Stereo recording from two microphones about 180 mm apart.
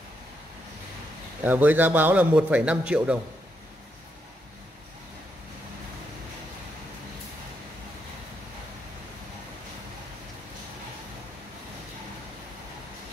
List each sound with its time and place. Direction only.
1.4 s a man's voice: 10° right (ahead or behind)